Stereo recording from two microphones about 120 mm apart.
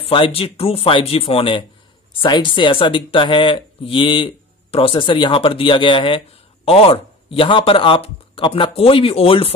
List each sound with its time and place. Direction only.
0.0 s speech: 50° left (ahead or behind)